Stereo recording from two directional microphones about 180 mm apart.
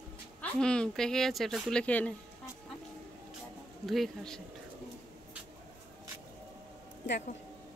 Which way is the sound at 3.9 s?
Centre (ahead or behind).